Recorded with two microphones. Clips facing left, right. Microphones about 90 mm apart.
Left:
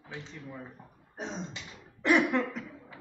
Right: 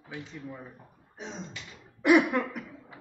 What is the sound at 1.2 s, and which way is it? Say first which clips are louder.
Beatboxing: left 3 dB; 45° left (ahead or behind).